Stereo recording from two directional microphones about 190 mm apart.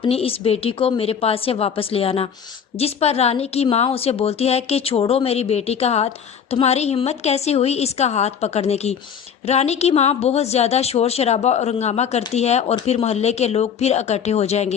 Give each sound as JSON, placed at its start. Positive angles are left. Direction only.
{"t": 0.0, "sound": "a woman's voice", "side_deg": 30}